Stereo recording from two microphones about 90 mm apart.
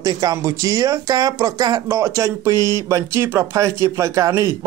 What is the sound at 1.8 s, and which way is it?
Speech, 30° right (ahead or behind).